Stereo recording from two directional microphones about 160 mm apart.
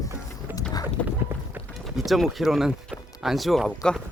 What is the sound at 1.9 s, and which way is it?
Speech, centre (ahead or behind).